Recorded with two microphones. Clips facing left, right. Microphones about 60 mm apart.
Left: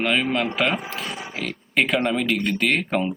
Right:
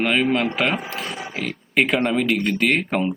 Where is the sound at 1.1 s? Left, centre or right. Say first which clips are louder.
Right 2 dB; right.